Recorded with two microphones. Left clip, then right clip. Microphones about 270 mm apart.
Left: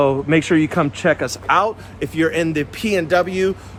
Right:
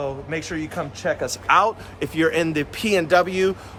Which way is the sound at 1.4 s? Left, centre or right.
Centre.